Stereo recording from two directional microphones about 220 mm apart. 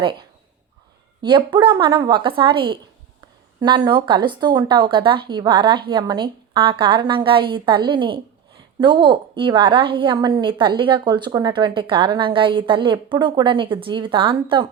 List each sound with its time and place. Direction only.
0.0 s a woman's voice: 20° right (ahead or behind)